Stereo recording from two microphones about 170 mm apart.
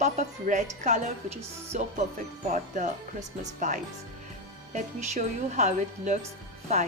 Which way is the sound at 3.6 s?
50° right (ahead or behind).